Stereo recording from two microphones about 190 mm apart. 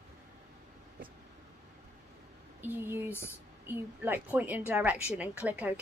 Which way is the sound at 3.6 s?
10° right (ahead or behind).